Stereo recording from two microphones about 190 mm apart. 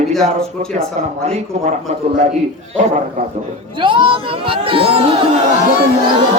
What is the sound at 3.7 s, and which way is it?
Speech, 25° right (ahead or behind).